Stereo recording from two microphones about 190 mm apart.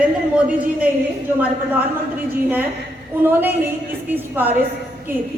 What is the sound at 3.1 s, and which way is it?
A woman's voice, 10° right (ahead or behind).